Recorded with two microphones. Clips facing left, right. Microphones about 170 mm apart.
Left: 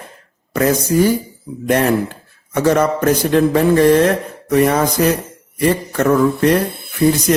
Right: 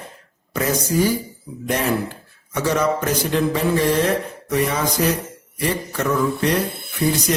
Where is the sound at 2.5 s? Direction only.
55° left (ahead or behind).